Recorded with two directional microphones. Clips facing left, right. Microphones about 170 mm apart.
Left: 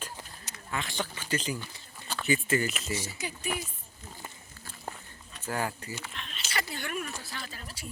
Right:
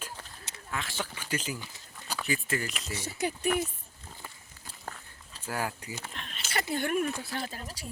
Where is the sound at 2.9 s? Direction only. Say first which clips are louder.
Right 2 dB; 60° right (ahead or behind).